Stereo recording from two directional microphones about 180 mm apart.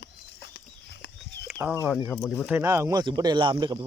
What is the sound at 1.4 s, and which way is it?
Chicken, 10° right (ahead or behind).